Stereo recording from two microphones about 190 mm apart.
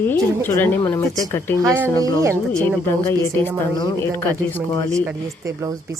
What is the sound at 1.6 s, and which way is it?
Speech, 15° right (ahead or behind).